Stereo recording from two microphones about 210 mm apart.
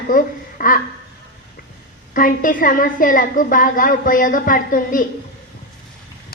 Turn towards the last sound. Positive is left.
turn(degrees=40)  # may be behind; listen again after turning